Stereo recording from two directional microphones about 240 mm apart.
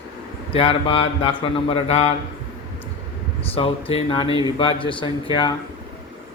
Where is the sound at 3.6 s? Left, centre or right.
Left.